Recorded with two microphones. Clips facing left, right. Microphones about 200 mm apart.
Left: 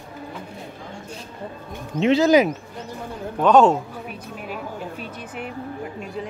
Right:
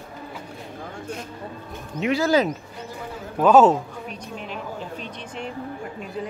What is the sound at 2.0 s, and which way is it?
Speech, 25° left (ahead or behind).